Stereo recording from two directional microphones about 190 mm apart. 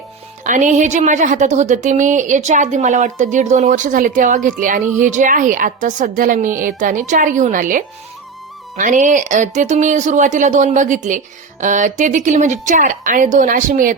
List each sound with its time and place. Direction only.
0.4 s a woman's voice: 40° right (ahead or behind)